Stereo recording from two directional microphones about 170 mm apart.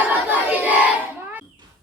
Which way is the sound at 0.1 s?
10° right (ahead or behind).